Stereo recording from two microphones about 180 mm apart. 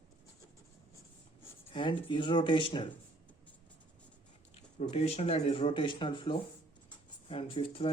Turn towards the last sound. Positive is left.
turn(degrees=30)  # may be behind; listen again after turning